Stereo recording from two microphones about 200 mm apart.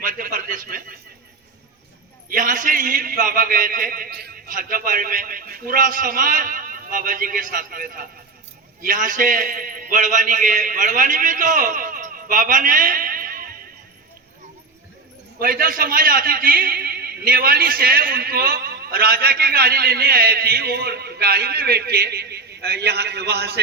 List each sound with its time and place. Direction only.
0.0 s a sound: 45° right (ahead or behind)
2.3 s a man's voice: 40° right (ahead or behind)
15.4 s a man's voice: 45° right (ahead or behind)